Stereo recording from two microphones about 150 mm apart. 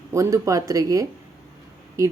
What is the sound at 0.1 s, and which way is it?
A woman's voice, 20° right (ahead or behind).